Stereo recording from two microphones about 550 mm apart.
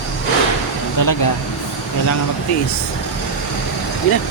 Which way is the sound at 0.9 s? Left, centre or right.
Left.